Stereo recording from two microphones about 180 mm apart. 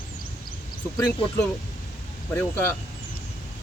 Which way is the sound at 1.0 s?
15° left (ahead or behind).